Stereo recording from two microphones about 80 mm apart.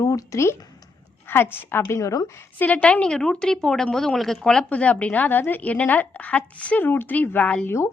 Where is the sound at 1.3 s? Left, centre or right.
Left.